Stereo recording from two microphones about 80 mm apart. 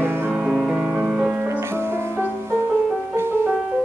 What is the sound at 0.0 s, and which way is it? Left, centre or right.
Music, right.